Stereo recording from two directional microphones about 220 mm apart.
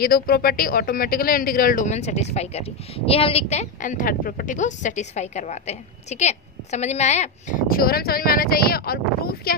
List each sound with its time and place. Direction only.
0.0 s speech: 40° left (ahead or behind)